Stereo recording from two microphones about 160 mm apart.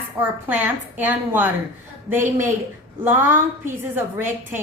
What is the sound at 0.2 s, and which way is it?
A woman's voice, 10° right (ahead or behind).